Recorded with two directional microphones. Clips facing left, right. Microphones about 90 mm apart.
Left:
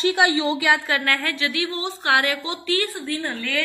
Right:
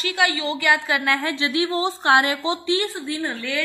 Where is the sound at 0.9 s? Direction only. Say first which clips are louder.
Right 1 dB; 15° right (ahead or behind).